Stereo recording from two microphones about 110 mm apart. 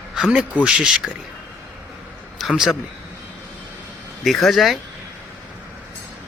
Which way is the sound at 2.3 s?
5° right (ahead or behind).